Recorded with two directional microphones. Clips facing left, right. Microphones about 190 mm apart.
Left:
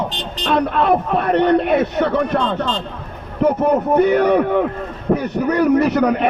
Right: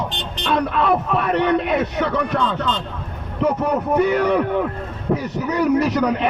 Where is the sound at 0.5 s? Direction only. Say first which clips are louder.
Left 3 dB; 55° left (ahead or behind).